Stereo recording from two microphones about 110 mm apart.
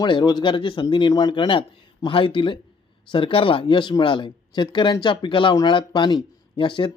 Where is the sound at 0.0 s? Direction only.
45° left (ahead or behind).